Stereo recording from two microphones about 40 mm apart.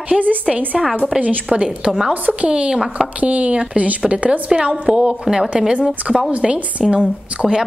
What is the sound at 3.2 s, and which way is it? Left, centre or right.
A woman's voice, right.